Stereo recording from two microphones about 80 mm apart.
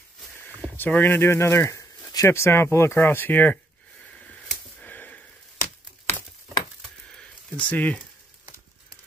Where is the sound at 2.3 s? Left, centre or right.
Left.